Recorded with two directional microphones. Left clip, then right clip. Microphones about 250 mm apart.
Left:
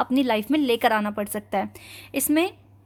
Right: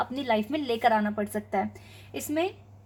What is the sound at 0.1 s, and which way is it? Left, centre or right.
Speech, left.